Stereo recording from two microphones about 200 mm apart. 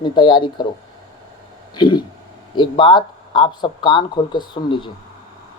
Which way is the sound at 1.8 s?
20° left (ahead or behind).